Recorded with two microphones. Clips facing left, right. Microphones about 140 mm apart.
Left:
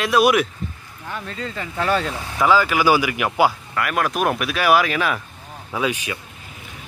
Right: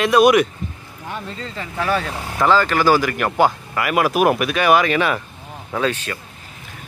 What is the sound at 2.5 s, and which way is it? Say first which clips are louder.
Speech: right 1 dB; 10° left (ahead or behind).